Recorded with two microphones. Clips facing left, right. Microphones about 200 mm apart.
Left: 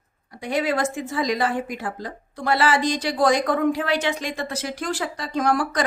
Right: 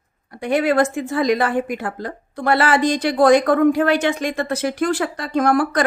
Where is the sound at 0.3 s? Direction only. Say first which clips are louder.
Right 5 dB; 60° right (ahead or behind).